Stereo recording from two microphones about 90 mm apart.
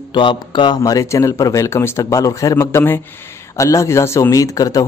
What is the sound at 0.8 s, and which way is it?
A man's voice, 35° left (ahead or behind).